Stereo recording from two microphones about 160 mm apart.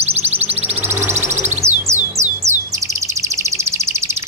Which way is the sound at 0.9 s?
15° right (ahead or behind).